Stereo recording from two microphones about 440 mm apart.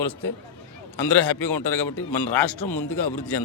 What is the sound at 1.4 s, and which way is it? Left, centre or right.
Speech, left.